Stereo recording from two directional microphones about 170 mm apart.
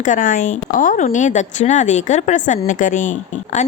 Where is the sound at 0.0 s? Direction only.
50° left (ahead or behind).